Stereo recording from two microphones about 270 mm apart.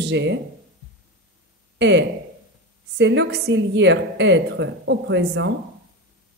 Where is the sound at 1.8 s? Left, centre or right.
Right.